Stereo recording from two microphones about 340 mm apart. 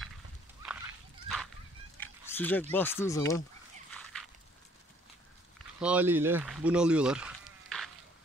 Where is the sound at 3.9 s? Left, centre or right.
Centre.